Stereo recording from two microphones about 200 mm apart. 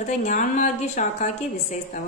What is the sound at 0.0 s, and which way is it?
A woman's voice, 40° left (ahead or behind).